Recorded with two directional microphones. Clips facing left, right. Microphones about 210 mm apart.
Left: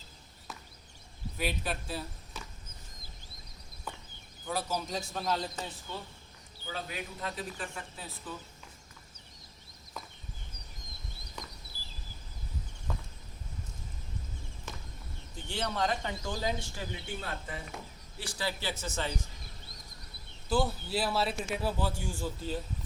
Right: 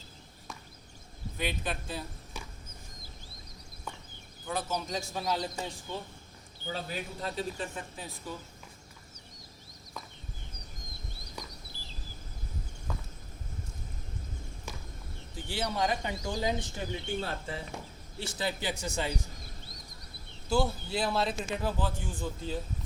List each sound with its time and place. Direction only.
1.4 s a man's voice: 5° left (ahead or behind)
4.4 s a man's voice: 5° left (ahead or behind)
5.4 s speech: 15° right (ahead or behind)
6.7 s speech: 30° right (ahead or behind); by 8.4 s 15° right (ahead or behind)
11.7 s a sound: 40° left (ahead or behind)
15.4 s speech: 10° right (ahead or behind)
20.5 s a man's voice: 5° left (ahead or behind)